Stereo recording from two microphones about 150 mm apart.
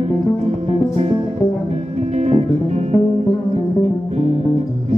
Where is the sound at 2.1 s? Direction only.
45° right (ahead or behind).